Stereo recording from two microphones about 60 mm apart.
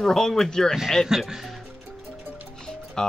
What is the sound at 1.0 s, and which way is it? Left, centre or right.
Speech, centre.